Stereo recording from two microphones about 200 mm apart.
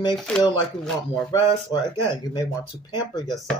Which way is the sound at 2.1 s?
20° left (ahead or behind).